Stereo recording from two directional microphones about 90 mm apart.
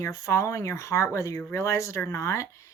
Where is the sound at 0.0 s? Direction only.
35° left (ahead or behind).